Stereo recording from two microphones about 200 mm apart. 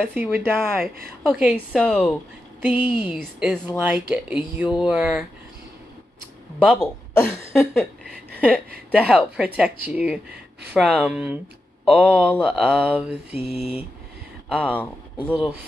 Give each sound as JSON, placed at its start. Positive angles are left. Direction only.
{"t": 0.0, "sound": "speech", "side_deg": -10}
{"t": 2.6, "sound": "speech", "side_deg": -10}
{"t": 6.6, "sound": "speech", "side_deg": 5}
{"t": 7.2, "sound": "a sound", "side_deg": 10}
{"t": 8.9, "sound": "speech", "side_deg": -5}
{"t": 12.6, "sound": "speech", "side_deg": -5}
{"t": 13.4, "sound": "speech", "side_deg": 30}
{"t": 14.5, "sound": "speech", "side_deg": 5}